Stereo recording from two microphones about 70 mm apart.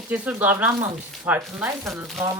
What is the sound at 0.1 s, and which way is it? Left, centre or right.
Speech, right.